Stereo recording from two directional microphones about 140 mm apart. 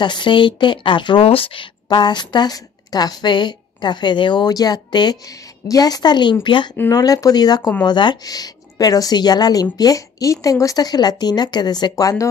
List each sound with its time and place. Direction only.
0.0 s a woman's voice: 35° left (ahead or behind)